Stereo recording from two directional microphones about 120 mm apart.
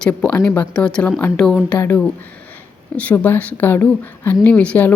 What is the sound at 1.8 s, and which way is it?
Speech, 15° left (ahead or behind).